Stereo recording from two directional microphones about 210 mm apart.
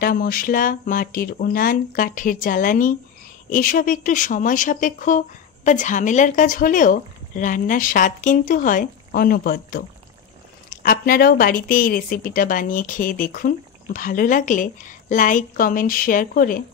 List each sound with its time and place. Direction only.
0.0 s speech: 45° left (ahead or behind)